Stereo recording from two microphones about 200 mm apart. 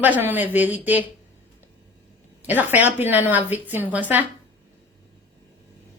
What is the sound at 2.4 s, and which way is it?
A woman's voice, 10° right (ahead or behind).